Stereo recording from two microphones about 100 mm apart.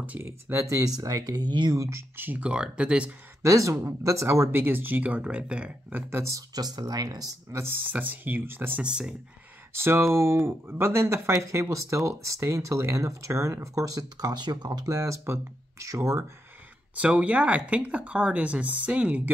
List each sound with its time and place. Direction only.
0.0 s speech: 15° right (ahead or behind)
0.5 s speech: 30° right (ahead or behind); by 1.8 s 45° right (ahead or behind)
1.8 s speech: 30° right (ahead or behind); by 3.2 s 10° right (ahead or behind)
3.4 s speech: 35° right (ahead or behind)
7.5 s speech: 25° right (ahead or behind)
9.8 s speech: 25° right (ahead or behind)
16.9 s speech: 15° right (ahead or behind)